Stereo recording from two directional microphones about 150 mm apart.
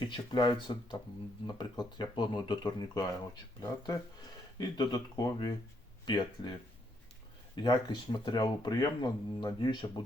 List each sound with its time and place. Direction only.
0.1 s speech: 30° left (ahead or behind)
7.5 s speech: 30° left (ahead or behind)